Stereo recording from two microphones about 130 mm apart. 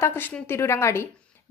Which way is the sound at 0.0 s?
20° left (ahead or behind).